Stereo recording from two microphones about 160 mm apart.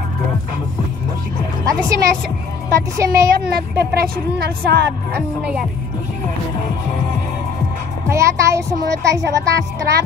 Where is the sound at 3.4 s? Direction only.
70° right (ahead or behind).